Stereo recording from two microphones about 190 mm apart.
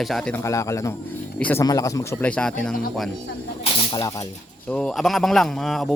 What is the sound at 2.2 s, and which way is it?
Speech, 5° left (ahead or behind).